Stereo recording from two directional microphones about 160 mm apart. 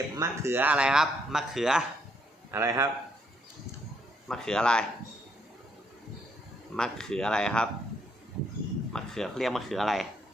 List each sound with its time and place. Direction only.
0.2 s speech: 15° right (ahead or behind)
2.5 s a man's voice: 20° right (ahead or behind)
4.3 s speech: 5° left (ahead or behind)
6.7 s speech: 5° left (ahead or behind)
8.9 s speech: 5° left (ahead or behind)